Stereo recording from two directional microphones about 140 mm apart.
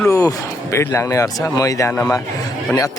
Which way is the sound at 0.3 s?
20° left (ahead or behind).